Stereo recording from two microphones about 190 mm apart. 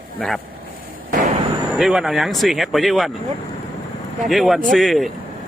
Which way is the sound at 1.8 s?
Centre (ahead or behind).